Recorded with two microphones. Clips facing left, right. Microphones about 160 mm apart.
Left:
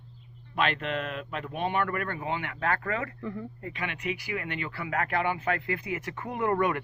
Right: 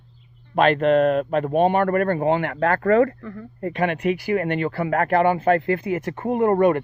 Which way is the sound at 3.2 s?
15° left (ahead or behind).